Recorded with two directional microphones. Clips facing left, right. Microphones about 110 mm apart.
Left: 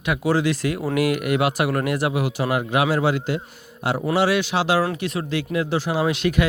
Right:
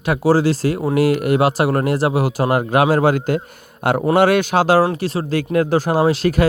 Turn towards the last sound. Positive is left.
turn(degrees=-40)  # may be behind; listen again after turning